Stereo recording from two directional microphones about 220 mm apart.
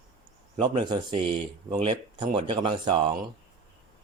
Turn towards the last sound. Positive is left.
turn(degrees=-20)  # may be behind; listen again after turning